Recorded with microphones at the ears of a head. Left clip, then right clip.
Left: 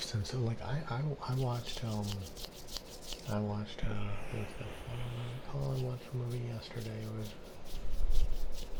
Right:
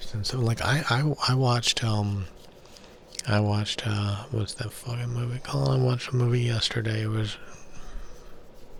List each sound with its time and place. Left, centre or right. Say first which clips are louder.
0.2 s speech: right 11 dB; right